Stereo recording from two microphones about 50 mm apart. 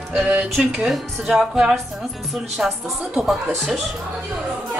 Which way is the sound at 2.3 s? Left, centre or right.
Centre.